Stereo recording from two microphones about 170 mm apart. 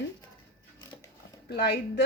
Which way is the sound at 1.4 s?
80° left.